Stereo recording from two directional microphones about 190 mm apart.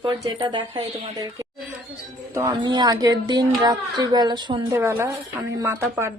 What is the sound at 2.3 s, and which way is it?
A woman's voice, 20° right (ahead or behind).